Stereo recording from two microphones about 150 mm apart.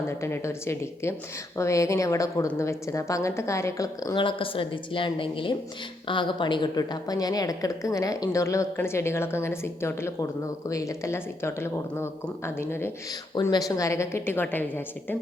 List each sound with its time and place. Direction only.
0.1 s speech: 15° left (ahead or behind)